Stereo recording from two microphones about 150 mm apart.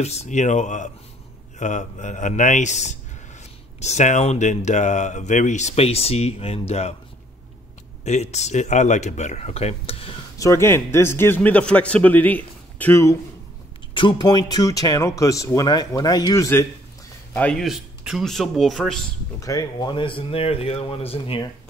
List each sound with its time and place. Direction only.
0.0 s speech: 45° left (ahead or behind)
8.0 s speech: 50° left (ahead or behind)
10.4 s a man's voice: 20° left (ahead or behind)
13.9 s speech: 30° left (ahead or behind)
17.4 s speech: 5° left (ahead or behind)
19.4 s speech: 25° left (ahead or behind)